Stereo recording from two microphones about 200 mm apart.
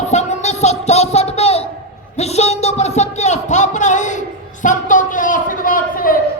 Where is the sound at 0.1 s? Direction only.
35° left (ahead or behind).